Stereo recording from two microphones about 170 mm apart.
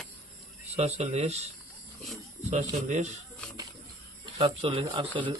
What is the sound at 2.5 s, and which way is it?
Speech, 40° right (ahead or behind).